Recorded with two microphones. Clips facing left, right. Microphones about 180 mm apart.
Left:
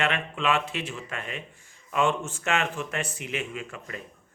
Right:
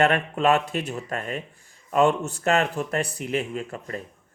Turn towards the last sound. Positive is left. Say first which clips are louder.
# right 5 dB
turn(degrees=-40)  # may be behind; listen again after turning